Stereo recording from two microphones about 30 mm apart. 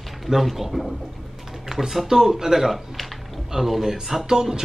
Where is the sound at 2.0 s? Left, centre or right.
Centre.